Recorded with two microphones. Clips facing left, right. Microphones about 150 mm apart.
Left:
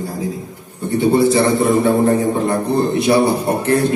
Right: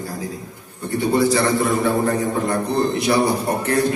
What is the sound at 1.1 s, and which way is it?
A man's voice, 25° left (ahead or behind).